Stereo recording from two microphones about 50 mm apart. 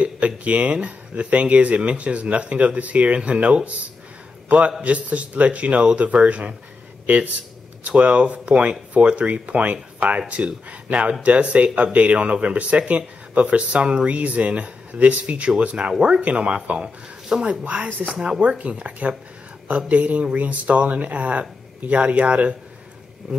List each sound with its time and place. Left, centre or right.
0.0 s a man's voice: right
7.8 s speech: right
18.4 s speech: right